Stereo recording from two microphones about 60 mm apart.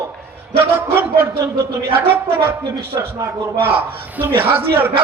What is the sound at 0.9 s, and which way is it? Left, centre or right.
A man's voice, right.